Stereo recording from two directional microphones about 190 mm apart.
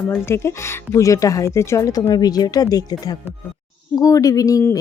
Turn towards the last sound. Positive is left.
turn(degrees=15)  # may be behind; listen again after turning